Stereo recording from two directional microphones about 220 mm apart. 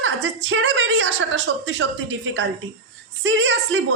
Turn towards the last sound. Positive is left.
turn(degrees=-55)  # may be behind; listen again after turning